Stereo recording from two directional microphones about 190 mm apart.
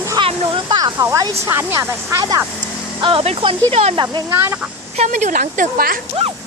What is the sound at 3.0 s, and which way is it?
Speech, 30° right (ahead or behind).